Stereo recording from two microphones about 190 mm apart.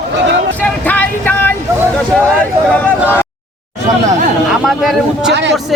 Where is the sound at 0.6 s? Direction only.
10° left (ahead or behind).